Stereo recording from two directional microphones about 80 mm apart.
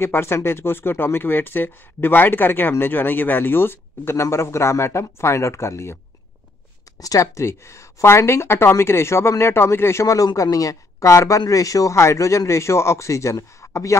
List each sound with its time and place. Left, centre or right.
0.0 s speech: left
7.0 s speech: left